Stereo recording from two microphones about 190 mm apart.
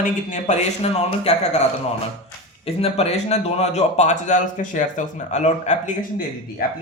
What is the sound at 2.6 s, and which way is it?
Speech, 35° left (ahead or behind).